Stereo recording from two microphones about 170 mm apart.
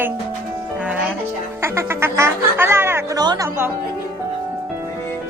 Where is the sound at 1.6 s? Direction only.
15° right (ahead or behind).